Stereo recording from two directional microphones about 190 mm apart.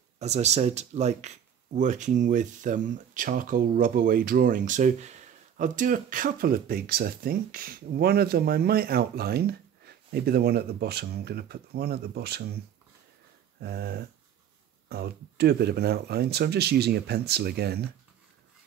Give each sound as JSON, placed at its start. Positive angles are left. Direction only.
{"t": 0.2, "sound": "speech", "side_deg": -35}
{"t": 13.6, "sound": "speech", "side_deg": -55}